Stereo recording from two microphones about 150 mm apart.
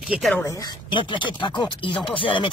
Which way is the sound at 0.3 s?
20° left (ahead or behind).